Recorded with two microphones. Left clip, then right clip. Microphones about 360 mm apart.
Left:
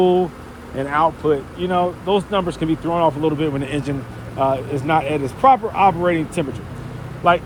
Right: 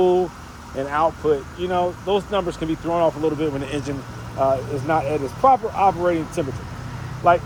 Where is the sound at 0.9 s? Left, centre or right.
Left.